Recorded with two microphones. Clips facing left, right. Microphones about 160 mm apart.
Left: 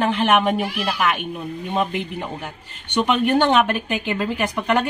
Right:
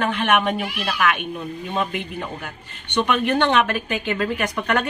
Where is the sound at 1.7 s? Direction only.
20° left (ahead or behind).